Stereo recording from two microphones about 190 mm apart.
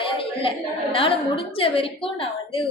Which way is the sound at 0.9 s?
30° left (ahead or behind).